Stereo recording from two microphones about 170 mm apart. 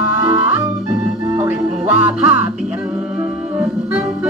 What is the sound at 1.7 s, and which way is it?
Music, 10° right (ahead or behind).